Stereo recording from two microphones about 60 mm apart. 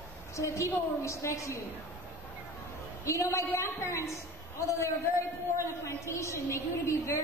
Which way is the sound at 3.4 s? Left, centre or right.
Left.